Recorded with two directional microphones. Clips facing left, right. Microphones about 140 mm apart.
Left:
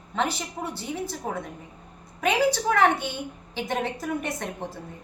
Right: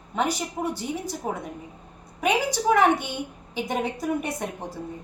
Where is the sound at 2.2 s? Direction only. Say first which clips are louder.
Even; 10° right (ahead or behind).